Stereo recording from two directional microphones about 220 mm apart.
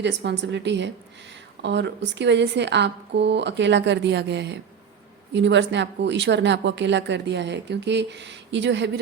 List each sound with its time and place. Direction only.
0.0 s speech: 50° right (ahead or behind)